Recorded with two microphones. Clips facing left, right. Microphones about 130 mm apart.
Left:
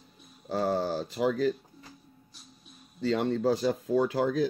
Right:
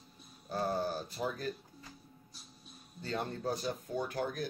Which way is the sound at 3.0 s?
90° left.